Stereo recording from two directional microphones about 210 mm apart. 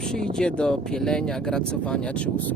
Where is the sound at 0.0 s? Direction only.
5° left (ahead or behind).